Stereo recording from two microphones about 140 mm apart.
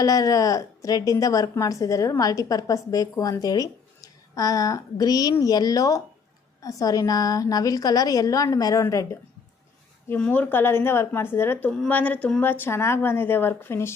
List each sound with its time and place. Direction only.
0.0 s a woman's voice: 25° left (ahead or behind)
10.1 s speech: 10° left (ahead or behind)